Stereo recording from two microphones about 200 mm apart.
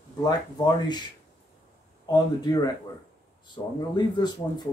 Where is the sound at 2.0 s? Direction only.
20° left (ahead or behind).